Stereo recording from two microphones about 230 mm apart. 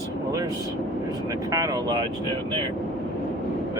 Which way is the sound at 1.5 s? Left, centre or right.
Centre.